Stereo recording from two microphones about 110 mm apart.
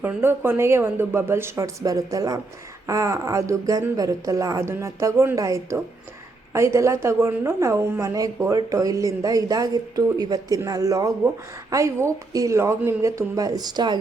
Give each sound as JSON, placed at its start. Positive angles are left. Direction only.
{"t": 0.0, "sound": "a woman's voice", "side_deg": -20}